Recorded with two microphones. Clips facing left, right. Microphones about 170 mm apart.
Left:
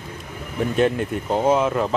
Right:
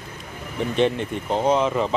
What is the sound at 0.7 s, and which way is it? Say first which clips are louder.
Speech: left 1 dB; 5° left (ahead or behind).